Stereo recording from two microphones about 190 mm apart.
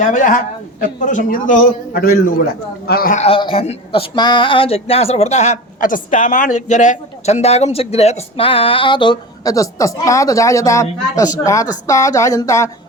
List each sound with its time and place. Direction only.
0.0 s a man's voice: 40° left (ahead or behind)
3.2 s speech: 30° left (ahead or behind)